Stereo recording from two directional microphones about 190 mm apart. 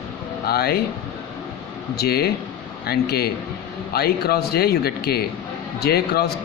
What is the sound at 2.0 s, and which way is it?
Speech, 55° left (ahead or behind).